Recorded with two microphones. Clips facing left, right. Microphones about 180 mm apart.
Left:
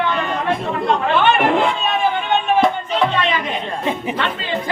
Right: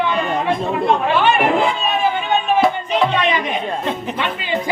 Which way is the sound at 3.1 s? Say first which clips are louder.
Right 2 dB; 15° right (ahead or behind).